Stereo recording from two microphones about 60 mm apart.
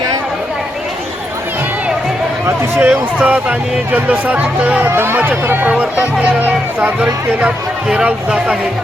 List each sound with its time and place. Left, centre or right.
2.8 s speech: right
4.9 s speech: right
5.6 s speech: right